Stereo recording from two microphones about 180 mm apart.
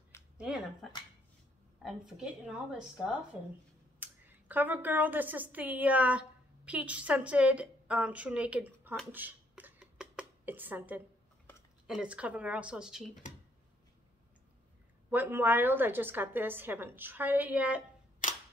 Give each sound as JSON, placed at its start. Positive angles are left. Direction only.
{"t": 0.4, "sound": "speech", "side_deg": -5}
{"t": 1.8, "sound": "a woman's voice", "side_deg": 0}
{"t": 9.1, "sound": "a sound", "side_deg": -10}
{"t": 11.9, "sound": "a woman's voice", "side_deg": -5}
{"t": 15.0, "sound": "a woman's voice", "side_deg": -10}
{"t": 18.2, "sound": "camera", "side_deg": 45}